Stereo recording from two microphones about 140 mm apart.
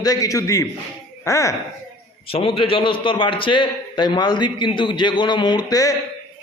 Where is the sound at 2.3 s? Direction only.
40° left (ahead or behind); by 5.9 s 25° left (ahead or behind).